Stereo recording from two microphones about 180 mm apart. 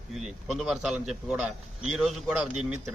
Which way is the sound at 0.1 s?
Centre (ahead or behind).